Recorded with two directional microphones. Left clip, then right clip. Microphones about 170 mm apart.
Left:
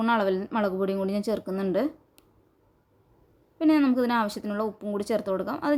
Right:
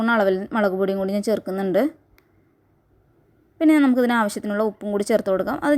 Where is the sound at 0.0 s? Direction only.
30° right (ahead or behind).